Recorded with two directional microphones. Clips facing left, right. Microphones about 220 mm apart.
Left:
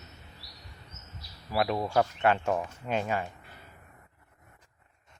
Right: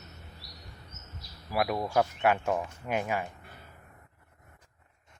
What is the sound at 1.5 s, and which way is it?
Speech, 10° right (ahead or behind).